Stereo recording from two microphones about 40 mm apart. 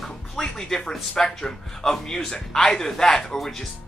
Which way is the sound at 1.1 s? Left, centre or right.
Centre.